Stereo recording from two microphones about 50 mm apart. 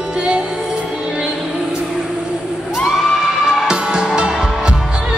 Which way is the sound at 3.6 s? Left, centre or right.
Centre.